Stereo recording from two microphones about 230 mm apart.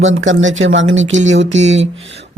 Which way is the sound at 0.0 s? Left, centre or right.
Right.